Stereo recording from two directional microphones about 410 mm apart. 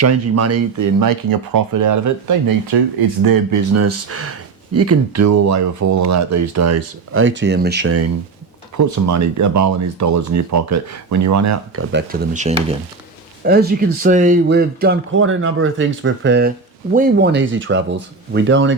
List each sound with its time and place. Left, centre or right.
0.0 s speech: right
0.9 s speech: right
2.7 s speech: right
3.2 s speech: right
8.8 s speech: right
11.8 s speech: right